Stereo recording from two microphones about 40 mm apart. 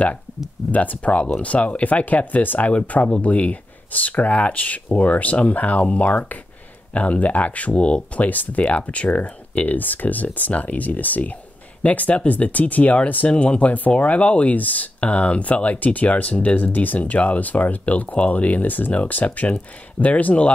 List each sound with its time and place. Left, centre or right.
0.7 s speech: left
8.2 s speech: left
13.3 s speech: left
16.7 s speech: left
17.0 s speech: left